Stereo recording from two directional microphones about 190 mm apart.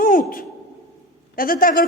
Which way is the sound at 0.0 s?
45° left (ahead or behind).